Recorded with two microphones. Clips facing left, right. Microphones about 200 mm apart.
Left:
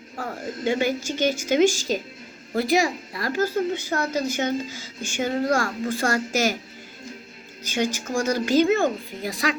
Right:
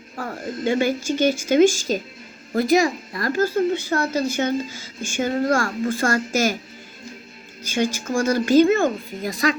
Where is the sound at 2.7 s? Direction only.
10° left (ahead or behind).